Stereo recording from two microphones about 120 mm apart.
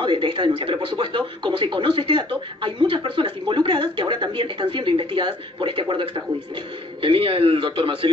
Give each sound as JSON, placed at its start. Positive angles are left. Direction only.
{"t": 0.0, "sound": "speech", "side_deg": -40}